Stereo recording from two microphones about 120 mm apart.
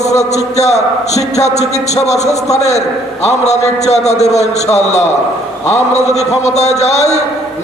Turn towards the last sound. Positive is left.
turn(degrees=70)  # may be behind; listen again after turning